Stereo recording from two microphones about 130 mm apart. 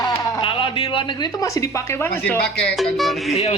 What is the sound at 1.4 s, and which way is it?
Speech, 25° left (ahead or behind).